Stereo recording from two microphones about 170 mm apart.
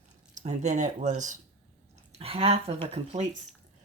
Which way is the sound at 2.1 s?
35° right (ahead or behind).